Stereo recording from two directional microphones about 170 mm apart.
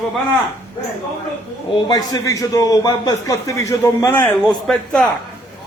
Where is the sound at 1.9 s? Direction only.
20° left (ahead or behind).